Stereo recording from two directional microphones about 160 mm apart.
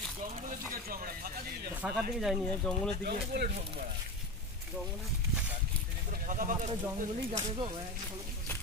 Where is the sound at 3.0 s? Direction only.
85° right.